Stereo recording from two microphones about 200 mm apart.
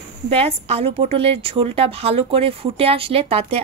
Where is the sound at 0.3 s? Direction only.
30° right (ahead or behind).